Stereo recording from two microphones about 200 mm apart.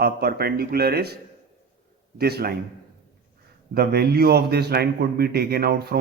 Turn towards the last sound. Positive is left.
turn(degrees=-55)  # may be behind; listen again after turning